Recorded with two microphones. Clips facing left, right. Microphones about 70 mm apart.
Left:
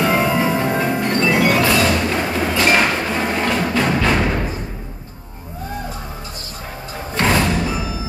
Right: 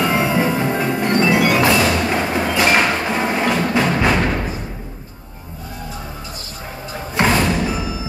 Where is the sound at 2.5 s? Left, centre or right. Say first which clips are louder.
Even; centre.